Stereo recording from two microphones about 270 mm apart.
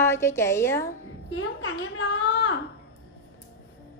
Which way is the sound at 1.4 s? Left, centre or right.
Left.